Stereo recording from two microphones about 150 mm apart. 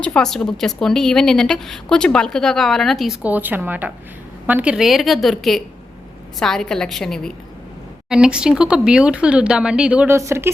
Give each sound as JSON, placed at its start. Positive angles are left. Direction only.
{"t": 0.0, "sound": "a woman's voice", "side_deg": 5}
{"t": 3.3, "sound": "a woman's voice", "side_deg": -10}